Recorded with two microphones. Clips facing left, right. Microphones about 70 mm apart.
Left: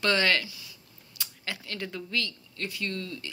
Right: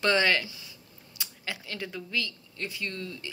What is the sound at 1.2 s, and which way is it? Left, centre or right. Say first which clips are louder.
A woman's voice: even; centre.